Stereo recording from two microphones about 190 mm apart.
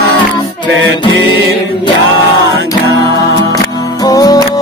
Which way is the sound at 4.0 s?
20° left (ahead or behind).